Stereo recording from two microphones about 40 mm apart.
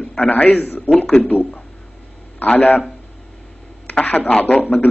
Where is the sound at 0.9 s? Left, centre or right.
Left.